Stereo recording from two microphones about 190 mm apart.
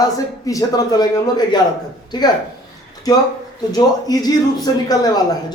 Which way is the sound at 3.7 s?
20° left (ahead or behind).